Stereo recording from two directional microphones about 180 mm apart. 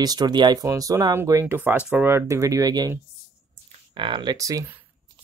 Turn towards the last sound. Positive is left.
turn(degrees=-20)  # may be behind; listen again after turning